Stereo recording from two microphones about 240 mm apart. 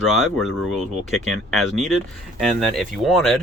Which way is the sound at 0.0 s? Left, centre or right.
Centre.